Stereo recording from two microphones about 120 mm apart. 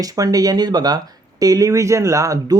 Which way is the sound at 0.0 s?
30° right (ahead or behind).